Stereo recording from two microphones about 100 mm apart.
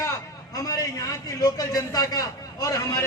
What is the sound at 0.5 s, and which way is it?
A man's voice, 35° left (ahead or behind).